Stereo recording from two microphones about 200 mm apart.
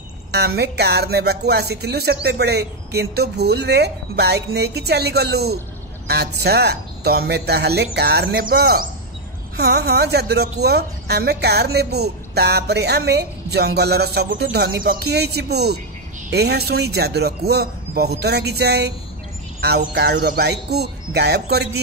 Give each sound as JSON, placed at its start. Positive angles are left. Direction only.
{"t": 0.6, "sound": "a woman's voice", "side_deg": -55}